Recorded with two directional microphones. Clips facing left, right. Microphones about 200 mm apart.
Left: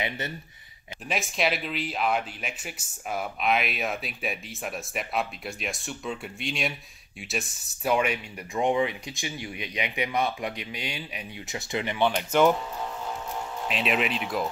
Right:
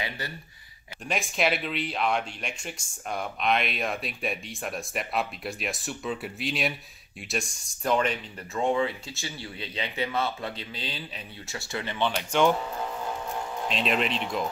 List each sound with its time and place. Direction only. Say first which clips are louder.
1.0 s speech: right 1 dB; centre (ahead or behind)
13.7 s speech: even; 5° left (ahead or behind)